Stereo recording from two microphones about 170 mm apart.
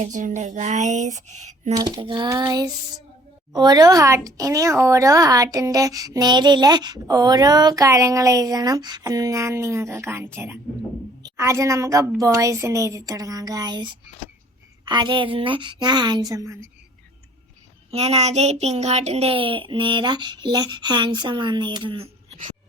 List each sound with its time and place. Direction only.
0.0 s speech: 50° right (ahead or behind)
1.7 s a woman's voice: 25° right (ahead or behind)
17.9 s speech: 40° right (ahead or behind)